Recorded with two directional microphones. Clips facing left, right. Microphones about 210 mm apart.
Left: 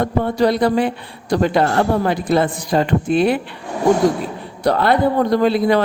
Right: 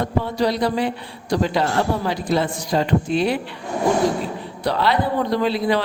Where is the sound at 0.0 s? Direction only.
55° left (ahead or behind).